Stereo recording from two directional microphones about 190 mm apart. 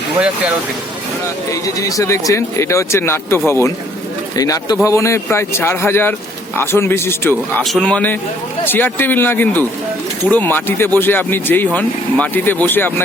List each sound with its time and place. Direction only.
1.5 s a man's voice: 15° left (ahead or behind)